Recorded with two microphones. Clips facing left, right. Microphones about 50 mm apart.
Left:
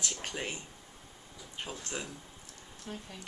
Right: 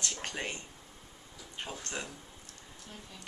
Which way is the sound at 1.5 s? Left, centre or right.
Centre.